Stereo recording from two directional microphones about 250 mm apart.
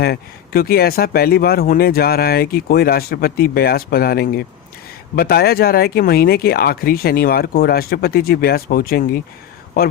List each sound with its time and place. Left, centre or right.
0.0 s speech: left